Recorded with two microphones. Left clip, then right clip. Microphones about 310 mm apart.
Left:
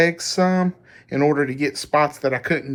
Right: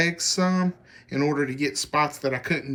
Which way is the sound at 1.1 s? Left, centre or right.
Centre.